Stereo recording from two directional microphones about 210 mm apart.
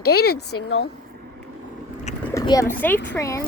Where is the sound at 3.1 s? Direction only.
15° left (ahead or behind).